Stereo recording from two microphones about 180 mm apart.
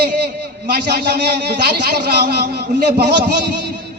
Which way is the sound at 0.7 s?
60° right (ahead or behind).